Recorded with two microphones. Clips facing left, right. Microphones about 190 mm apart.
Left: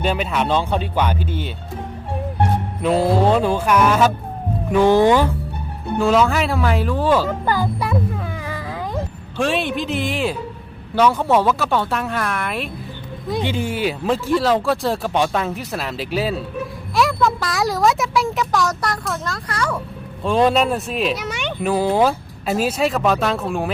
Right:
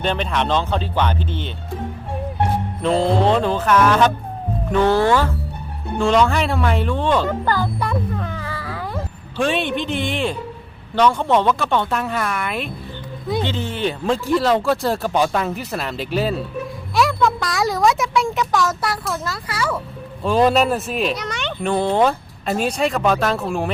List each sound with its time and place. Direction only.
0.0 s speech: 5° left (ahead or behind)
2.8 s speech: 5° left (ahead or behind)
6.0 s a sound: 5° left (ahead or behind)
9.4 s speech: centre (ahead or behind)
13.4 s speech: 10° left (ahead or behind)